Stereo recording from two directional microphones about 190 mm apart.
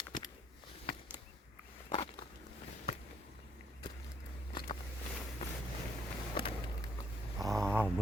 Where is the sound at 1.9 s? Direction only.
30° left (ahead or behind).